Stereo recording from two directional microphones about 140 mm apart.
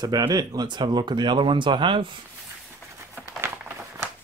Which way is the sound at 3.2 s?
15° right (ahead or behind).